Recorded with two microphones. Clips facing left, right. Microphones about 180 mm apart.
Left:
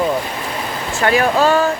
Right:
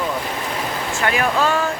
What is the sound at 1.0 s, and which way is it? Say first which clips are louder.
Speech: left 5 dB; 35° left (ahead or behind).